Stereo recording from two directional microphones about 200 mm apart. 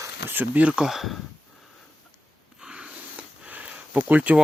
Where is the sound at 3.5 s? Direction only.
5° right (ahead or behind).